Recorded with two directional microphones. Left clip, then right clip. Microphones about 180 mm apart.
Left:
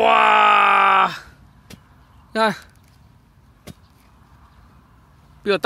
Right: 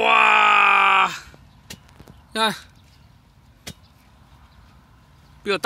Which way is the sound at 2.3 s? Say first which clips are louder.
Left 3 dB; 45° left (ahead or behind).